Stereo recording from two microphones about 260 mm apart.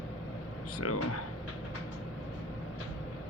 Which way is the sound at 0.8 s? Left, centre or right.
Left.